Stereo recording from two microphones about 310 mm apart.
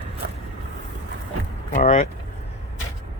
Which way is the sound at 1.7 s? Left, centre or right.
Centre.